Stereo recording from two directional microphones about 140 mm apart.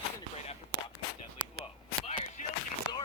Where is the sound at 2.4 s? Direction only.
60° left (ahead or behind).